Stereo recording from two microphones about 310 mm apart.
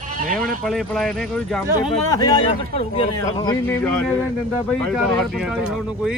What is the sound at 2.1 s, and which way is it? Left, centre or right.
A man's voice, centre.